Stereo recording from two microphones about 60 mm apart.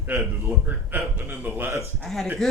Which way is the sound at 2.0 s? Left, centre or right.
Centre.